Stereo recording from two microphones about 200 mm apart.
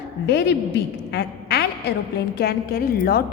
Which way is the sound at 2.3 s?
50° left (ahead or behind).